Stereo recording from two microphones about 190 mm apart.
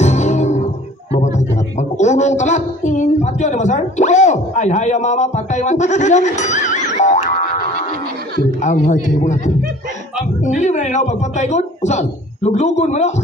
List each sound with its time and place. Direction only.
0.0 s music: 35° left (ahead or behind)
1.1 s a woman's voice: 40° left (ahead or behind)
8.5 s a woman's voice: 40° left (ahead or behind)
10.4 s a woman's voice: 40° left (ahead or behind)